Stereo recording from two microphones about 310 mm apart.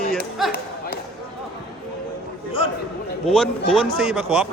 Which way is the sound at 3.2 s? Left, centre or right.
Centre.